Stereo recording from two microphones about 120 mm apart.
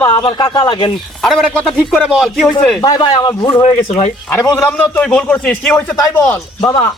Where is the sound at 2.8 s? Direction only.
40° left (ahead or behind).